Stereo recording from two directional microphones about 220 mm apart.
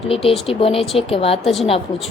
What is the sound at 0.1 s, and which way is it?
Speech, 25° left (ahead or behind).